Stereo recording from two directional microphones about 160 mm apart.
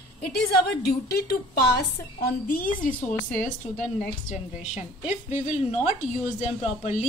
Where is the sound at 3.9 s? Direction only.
5° right (ahead or behind).